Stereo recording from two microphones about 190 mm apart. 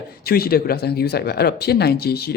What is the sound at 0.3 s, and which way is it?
Speech, 55° left (ahead or behind).